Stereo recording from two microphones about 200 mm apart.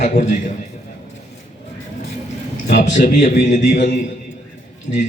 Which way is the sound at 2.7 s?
40° left (ahead or behind).